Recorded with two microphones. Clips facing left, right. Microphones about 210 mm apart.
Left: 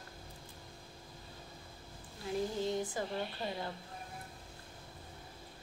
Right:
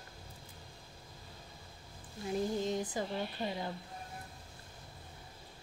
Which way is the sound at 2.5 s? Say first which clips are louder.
Right 1 dB; 20° right (ahead or behind).